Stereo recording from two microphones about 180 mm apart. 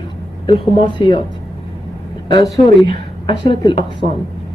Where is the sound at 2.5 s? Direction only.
25° left (ahead or behind).